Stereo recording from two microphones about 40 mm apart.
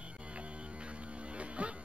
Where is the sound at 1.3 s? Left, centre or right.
Right.